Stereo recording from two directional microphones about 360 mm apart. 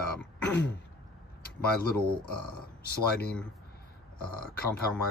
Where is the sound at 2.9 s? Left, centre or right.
Left.